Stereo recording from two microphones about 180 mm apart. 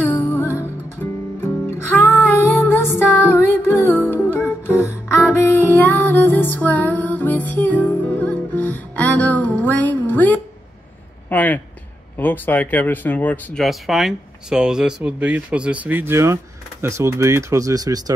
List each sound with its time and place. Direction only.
0.0 s music: 10° left (ahead or behind)
11.2 s a sound: 10° left (ahead or behind)
12.2 s speech: 10° left (ahead or behind); by 18.1 s 20° right (ahead or behind)